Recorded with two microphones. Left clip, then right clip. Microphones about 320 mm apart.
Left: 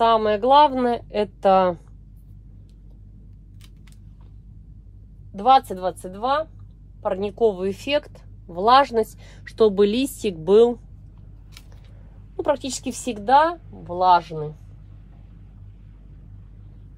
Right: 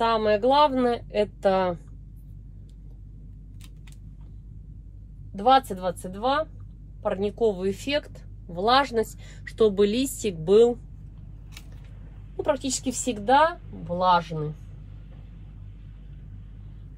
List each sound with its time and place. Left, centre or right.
0.0 s speech: left
5.4 s speech: left
7.0 s speech: centre
12.4 s speech: centre